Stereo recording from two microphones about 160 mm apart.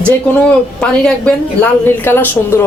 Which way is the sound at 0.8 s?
5° left (ahead or behind).